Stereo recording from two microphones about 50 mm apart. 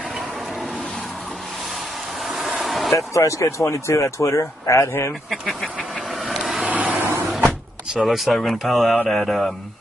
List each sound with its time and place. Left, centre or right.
2.6 s a sound: centre
3.0 s speech: left
4.7 s speech: left
6.2 s vehicle: centre
6.7 s vehicle: right
8.0 s speech: centre